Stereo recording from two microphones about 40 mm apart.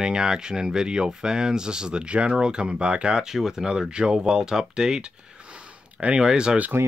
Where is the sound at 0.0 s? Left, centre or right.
Centre.